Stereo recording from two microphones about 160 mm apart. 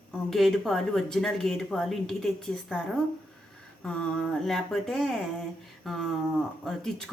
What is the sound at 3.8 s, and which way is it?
A woman's voice, 5° left (ahead or behind).